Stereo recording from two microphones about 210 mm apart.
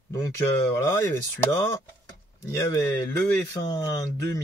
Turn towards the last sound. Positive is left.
turn(degrees=15)  # may be behind; listen again after turning